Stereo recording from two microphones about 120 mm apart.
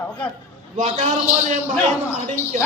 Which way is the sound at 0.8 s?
90° right.